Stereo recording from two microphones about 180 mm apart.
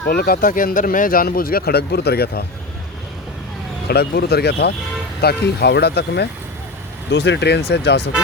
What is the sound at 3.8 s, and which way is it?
Speech, 60° left (ahead or behind).